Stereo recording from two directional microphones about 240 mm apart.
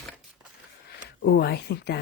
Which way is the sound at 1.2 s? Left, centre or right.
Left.